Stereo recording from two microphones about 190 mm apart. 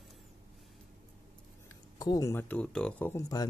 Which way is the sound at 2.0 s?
20° left (ahead or behind).